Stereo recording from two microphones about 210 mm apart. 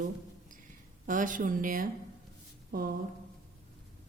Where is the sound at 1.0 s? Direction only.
40° right (ahead or behind).